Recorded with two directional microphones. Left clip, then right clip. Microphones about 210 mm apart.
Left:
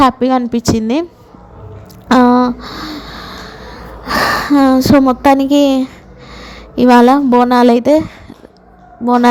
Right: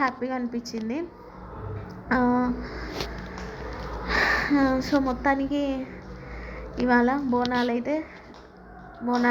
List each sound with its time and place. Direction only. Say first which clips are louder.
0.0 s speech: left 16 dB; 60° left (ahead or behind)
2.0 s a woman's voice: left 14 dB; 55° left (ahead or behind)